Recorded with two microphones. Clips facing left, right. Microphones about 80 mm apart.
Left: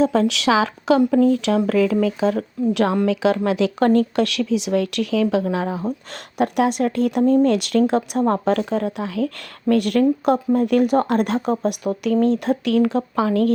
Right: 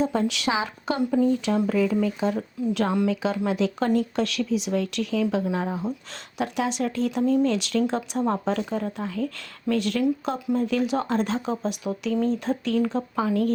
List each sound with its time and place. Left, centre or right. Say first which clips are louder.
0.0 s speech: left 6 dB; left
3.3 s speech: left 5 dB; left
6.4 s speech: left 7 dB; left